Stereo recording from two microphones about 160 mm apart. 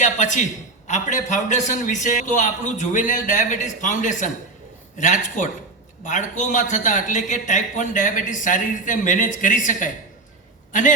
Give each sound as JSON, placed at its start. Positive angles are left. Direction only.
{"t": 0.0, "sound": "a man's voice", "side_deg": 50}